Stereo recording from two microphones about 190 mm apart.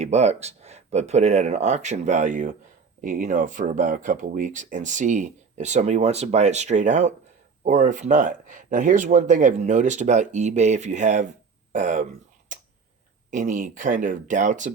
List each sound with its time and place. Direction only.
0.0 s speech: 35° right (ahead or behind)
13.3 s speech: 40° right (ahead or behind)